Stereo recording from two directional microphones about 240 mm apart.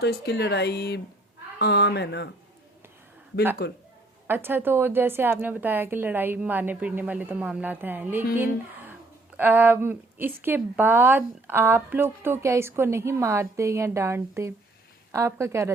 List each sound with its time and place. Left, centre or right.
0.0 s speech: left
3.6 s speech: left
4.3 s a woman's voice: centre